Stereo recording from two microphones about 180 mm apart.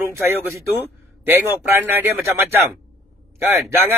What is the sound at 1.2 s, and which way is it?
Speech, 10° right (ahead or behind).